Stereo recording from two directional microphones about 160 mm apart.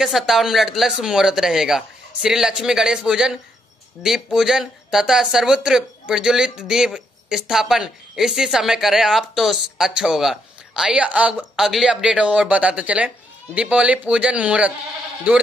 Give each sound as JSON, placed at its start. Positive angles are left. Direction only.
{"t": 0.0, "sound": "a man's voice", "side_deg": 0}